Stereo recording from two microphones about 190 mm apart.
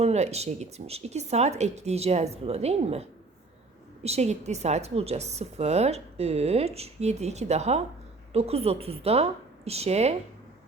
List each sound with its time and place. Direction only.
0.0 s a woman's voice: 35° right (ahead or behind)